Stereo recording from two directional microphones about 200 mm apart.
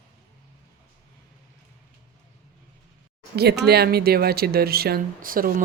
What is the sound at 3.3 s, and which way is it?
Speech, 55° right (ahead or behind).